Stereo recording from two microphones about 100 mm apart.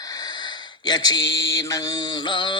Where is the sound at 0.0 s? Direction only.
40° left (ahead or behind).